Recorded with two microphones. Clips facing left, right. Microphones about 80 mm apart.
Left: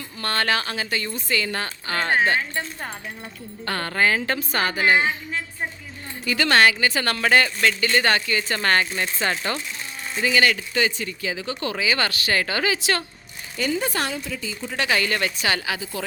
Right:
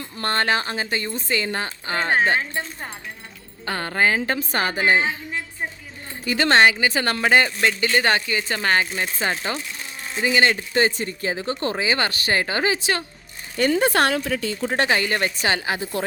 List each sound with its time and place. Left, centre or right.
0.2 s speech: right
3.7 s speech: centre
13.6 s speech: right
14.8 s speech: right
15.8 s speech: right